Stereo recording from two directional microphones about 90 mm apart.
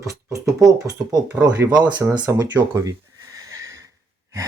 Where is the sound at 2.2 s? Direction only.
35° right (ahead or behind).